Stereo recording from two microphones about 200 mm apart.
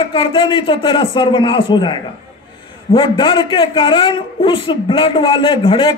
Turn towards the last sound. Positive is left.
turn(degrees=25)  # may be behind; listen again after turning